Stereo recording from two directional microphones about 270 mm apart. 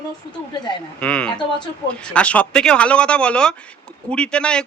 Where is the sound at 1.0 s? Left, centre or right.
Centre.